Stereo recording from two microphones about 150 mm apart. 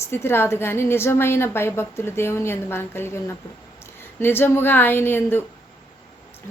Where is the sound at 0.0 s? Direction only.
15° left (ahead or behind).